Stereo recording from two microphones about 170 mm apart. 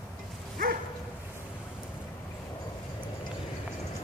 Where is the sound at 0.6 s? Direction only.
55° right (ahead or behind).